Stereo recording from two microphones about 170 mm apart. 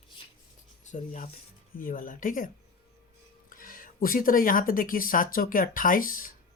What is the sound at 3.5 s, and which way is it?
Speech, 55° left (ahead or behind).